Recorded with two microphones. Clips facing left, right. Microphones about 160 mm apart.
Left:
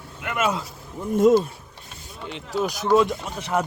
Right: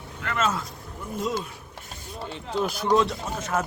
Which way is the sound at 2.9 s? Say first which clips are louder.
Left 4 dB; 10° left (ahead or behind).